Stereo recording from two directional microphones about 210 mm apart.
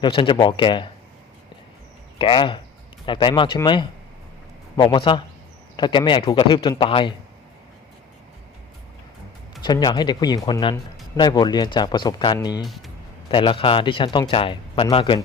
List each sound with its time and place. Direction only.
0.0 s speech: 25° left (ahead or behind)
2.1 s speech: 25° left (ahead or behind)
9.6 s speech: 20° left (ahead or behind)